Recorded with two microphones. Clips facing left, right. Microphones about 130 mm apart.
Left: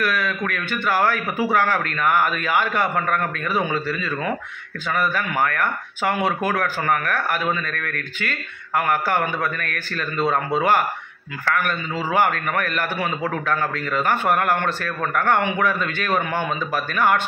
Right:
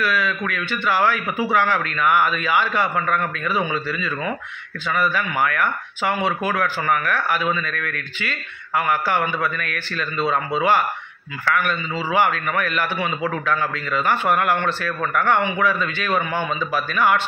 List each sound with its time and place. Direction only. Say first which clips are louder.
0.0 s a man's voice: right 1 dB; 50° left (ahead or behind)